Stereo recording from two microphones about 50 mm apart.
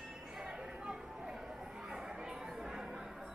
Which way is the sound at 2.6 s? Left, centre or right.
Centre.